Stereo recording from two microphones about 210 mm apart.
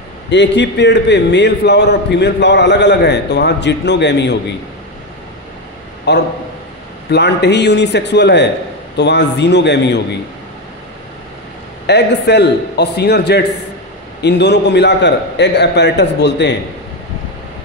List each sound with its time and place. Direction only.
0.3 s a man's voice: 55° left (ahead or behind)
6.1 s a man's voice: 55° left (ahead or behind)
11.8 s a man's voice: 55° left (ahead or behind)